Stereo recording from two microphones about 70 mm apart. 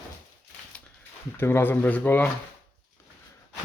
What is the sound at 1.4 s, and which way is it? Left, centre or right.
Speech, left.